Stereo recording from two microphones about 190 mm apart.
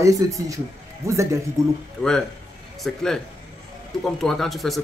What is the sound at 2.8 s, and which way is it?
Speech, centre (ahead or behind).